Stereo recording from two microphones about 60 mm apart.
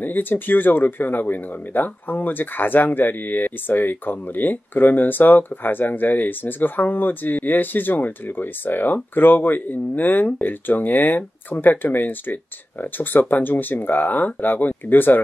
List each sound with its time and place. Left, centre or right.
0.0 s speech: left